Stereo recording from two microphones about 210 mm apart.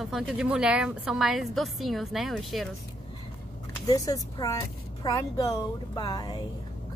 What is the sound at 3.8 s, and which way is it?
A woman's voice, 15° left (ahead or behind).